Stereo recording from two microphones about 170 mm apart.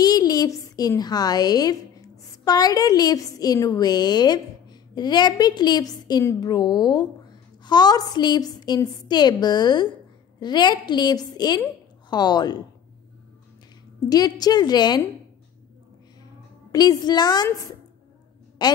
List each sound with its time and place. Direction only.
0.0 s a woman's voice: 25° left (ahead or behind)
13.9 s a woman's voice: 20° left (ahead or behind)
16.7 s a woman's voice: 25° left (ahead or behind)